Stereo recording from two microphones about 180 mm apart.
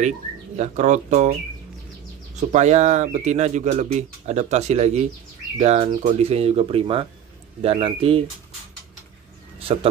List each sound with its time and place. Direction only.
0.6 s speech: 40° right (ahead or behind)
2.5 s speech: 40° right (ahead or behind)